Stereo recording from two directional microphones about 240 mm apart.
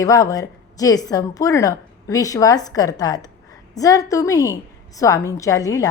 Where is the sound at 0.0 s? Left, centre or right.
Centre.